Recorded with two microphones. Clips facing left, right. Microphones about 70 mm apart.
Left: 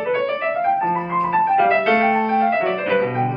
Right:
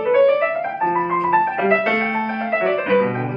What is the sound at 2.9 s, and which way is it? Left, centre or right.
Music, centre.